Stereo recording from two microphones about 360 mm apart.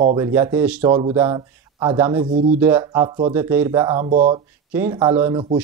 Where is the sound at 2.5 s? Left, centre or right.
Centre.